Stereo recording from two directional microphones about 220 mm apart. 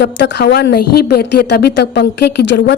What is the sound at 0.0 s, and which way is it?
A woman's voice, 55° left (ahead or behind).